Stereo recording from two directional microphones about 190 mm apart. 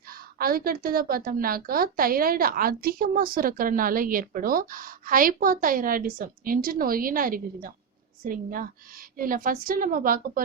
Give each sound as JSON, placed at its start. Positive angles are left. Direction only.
{"t": 0.1, "sound": "a woman's voice", "side_deg": -50}